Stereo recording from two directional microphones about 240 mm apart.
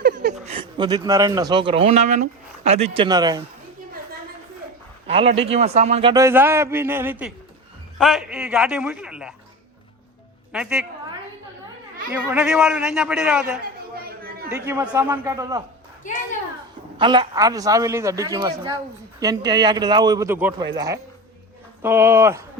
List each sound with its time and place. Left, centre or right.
0.0 s speech: right; by 3.4 s centre
5.0 s a man's voice: right; by 9.3 s centre
10.5 s a man's voice: centre
12.1 s a man's voice: centre
17.0 s a man's voice: centre